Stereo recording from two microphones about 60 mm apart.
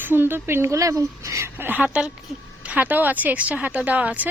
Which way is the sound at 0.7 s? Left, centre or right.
Right.